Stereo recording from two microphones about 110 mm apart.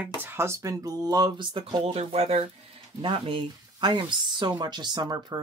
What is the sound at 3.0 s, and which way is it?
Speech, 50° right (ahead or behind).